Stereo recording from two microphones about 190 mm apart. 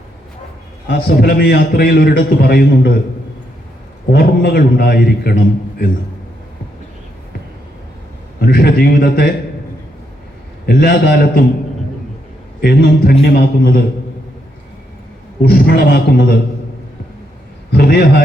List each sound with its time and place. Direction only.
0.9 s a man's voice: 60° left (ahead or behind)
4.1 s a man's voice: 55° left (ahead or behind)
8.4 s a man's voice: 55° left (ahead or behind)
10.7 s a man's voice: 55° left (ahead or behind)
12.6 s a man's voice: 55° left (ahead or behind)
15.4 s a man's voice: 55° left (ahead or behind)
17.7 s a sound: 55° left (ahead or behind)